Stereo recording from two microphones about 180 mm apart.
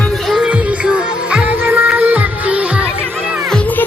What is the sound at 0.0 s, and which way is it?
Music, centre (ahead or behind).